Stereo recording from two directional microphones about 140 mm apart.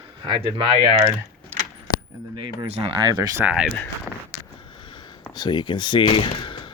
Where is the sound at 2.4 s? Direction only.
35° right (ahead or behind).